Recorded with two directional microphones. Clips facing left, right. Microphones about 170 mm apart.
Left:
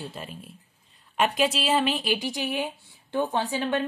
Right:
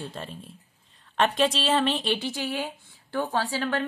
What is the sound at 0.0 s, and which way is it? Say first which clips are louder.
A woman's voice: right 1 dB; 5° left (ahead or behind).